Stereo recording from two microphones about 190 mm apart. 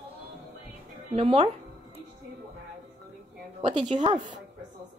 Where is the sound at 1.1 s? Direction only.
35° right (ahead or behind).